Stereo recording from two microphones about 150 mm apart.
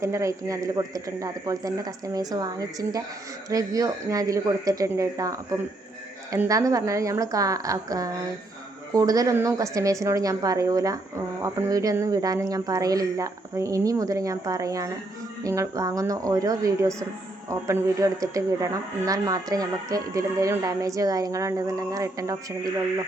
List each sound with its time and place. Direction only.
0.0 s speech: 20° right (ahead or behind)